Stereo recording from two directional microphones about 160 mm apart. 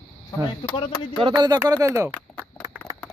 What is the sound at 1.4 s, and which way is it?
Speech, 25° right (ahead or behind).